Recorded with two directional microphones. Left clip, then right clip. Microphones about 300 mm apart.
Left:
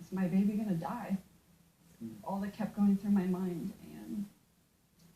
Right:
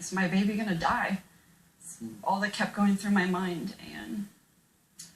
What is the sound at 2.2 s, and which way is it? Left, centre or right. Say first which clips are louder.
Speech: right 12 dB; centre.